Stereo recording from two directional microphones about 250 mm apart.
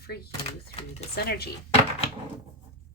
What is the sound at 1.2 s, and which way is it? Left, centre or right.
Speech, left.